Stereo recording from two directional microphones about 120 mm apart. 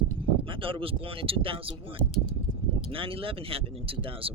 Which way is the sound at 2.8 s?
50° right (ahead or behind).